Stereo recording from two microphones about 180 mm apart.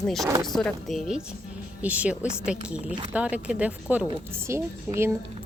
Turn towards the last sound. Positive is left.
turn(degrees=-15)  # may be behind; listen again after turning